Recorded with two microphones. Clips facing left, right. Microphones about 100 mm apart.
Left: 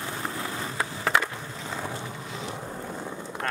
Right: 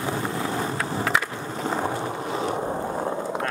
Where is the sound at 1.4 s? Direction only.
50° right (ahead or behind).